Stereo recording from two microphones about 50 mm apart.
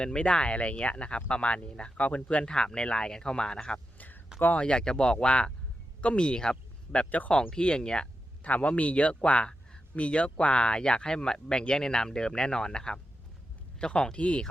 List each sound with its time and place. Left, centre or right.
0.0 s speech: centre
2.2 s speech: centre
3.9 s a sound: left
4.5 s speech: centre
8.4 s speech: left